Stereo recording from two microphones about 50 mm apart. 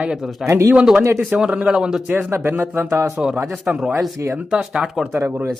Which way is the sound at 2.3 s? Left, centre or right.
Right.